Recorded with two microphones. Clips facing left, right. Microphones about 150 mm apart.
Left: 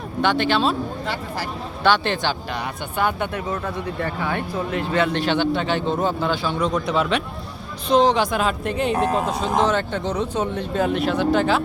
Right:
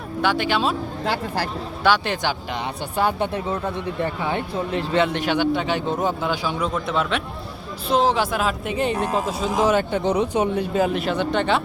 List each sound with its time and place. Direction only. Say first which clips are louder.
0.2 s speech: left 2 dB; 10° right (ahead or behind)
1.8 s speech: left 1 dB; 10° right (ahead or behind)
2.9 s speech: right 1 dB; 35° right (ahead or behind)
4.0 s a woman's voice: right 1 dB; 20° right (ahead or behind); by 11.6 s centre (ahead or behind)